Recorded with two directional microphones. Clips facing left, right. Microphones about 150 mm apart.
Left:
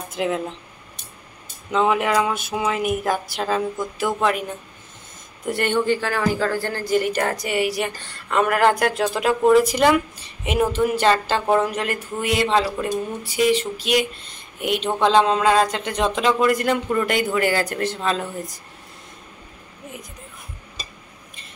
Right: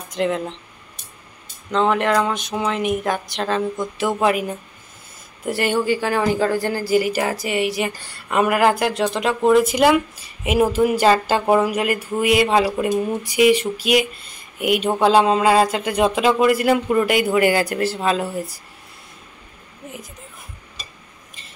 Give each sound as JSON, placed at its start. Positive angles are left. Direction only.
{"t": 0.1, "sound": "speech", "side_deg": 5}
{"t": 1.7, "sound": "speech", "side_deg": 5}
{"t": 8.0, "sound": "speech", "side_deg": -10}